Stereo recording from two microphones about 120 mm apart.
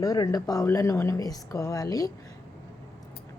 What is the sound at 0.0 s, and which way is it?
A woman's voice, 30° left (ahead or behind).